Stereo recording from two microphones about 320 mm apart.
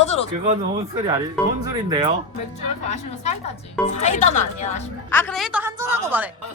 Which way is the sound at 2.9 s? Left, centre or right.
Left.